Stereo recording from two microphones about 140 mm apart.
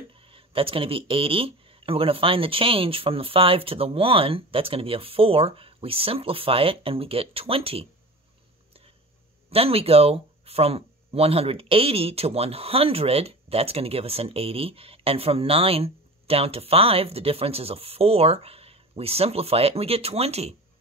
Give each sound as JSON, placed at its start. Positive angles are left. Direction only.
{"t": 0.2, "sound": "speech", "side_deg": -40}
{"t": 9.5, "sound": "speech", "side_deg": -45}